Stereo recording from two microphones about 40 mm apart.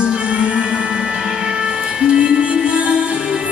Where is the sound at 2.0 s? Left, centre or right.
Right.